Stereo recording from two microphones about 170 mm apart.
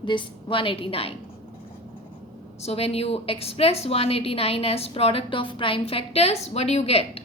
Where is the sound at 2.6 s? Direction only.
35° left (ahead or behind).